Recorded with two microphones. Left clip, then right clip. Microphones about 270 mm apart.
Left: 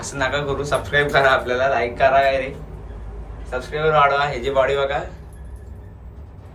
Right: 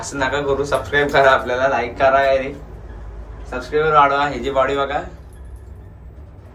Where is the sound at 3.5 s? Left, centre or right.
Right.